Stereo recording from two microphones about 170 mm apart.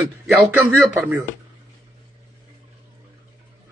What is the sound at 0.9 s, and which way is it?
Speech, 10° right (ahead or behind).